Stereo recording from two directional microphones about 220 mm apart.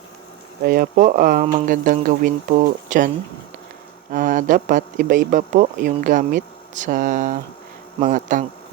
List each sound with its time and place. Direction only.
0.6 s a man's voice: 40° right (ahead or behind)
4.1 s a man's voice: 35° right (ahead or behind)